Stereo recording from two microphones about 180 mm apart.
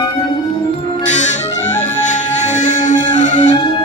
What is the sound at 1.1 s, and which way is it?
Music, 40° left (ahead or behind).